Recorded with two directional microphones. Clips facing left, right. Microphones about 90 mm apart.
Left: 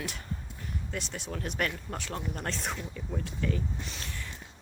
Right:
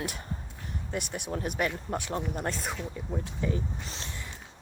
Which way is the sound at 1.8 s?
20° right (ahead or behind).